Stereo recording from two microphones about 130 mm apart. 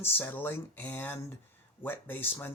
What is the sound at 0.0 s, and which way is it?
Speech, 15° left (ahead or behind).